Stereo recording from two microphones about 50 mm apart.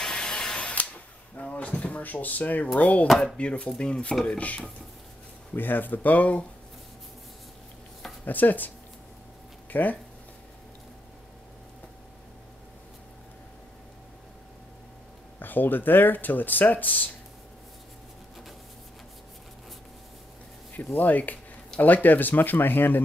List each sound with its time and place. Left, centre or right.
0.0 s a sound: centre
1.3 s speech: left
5.5 s speech: left
8.3 s speech: left
15.3 s speech: left
20.7 s speech: left